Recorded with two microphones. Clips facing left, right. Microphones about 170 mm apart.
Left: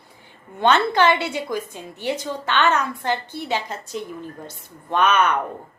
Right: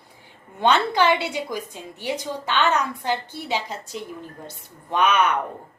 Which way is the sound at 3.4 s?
55° left (ahead or behind).